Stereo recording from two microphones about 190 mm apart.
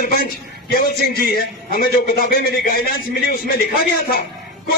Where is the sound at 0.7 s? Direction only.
50° left (ahead or behind).